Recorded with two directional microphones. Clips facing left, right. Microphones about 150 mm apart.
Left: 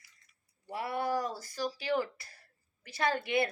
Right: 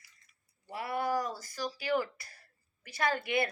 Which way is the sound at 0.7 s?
30° left (ahead or behind).